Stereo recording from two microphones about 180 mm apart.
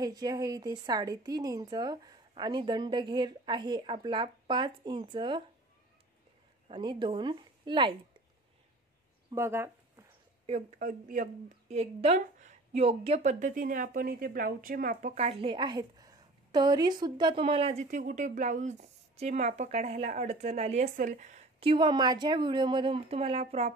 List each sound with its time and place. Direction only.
0.0 s a woman's voice: 20° right (ahead or behind)
6.7 s a woman's voice: 25° right (ahead or behind)
9.3 s a sound: 15° right (ahead or behind)
10.4 s speech: 35° right (ahead or behind)
10.8 s speech: 45° right (ahead or behind)